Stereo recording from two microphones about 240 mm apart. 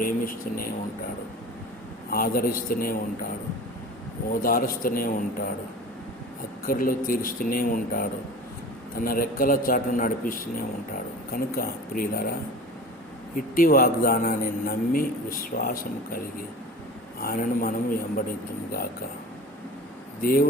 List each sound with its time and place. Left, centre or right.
0.0 s a man's voice: left
2.0 s a man's voice: left
4.4 s a man's voice: left
6.7 s a man's voice: left
20.2 s a man's voice: left